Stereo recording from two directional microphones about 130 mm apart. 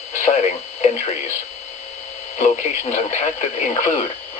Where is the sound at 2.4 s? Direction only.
55° left (ahead or behind).